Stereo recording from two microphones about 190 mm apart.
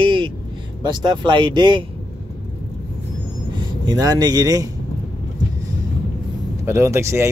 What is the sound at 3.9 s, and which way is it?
Speech, 20° right (ahead or behind).